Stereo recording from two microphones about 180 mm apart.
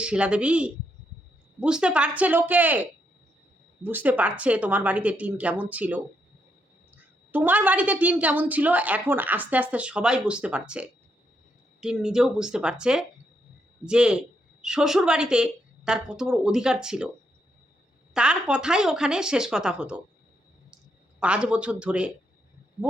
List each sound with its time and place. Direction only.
0.0 s a woman's voice: 5° right (ahead or behind)
3.8 s a woman's voice: 10° right (ahead or behind)
18.1 s a woman's voice: 5° right (ahead or behind)
21.2 s a woman's voice: 5° right (ahead or behind)